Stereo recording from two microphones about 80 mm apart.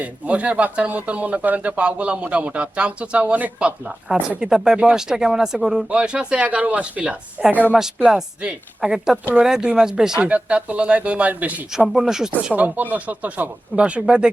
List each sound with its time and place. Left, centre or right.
0.0 s speech: centre
7.8 s speech: centre
11.9 s speech: centre
12.5 s speech: centre